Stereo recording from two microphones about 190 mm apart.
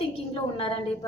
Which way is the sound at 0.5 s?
30° left (ahead or behind).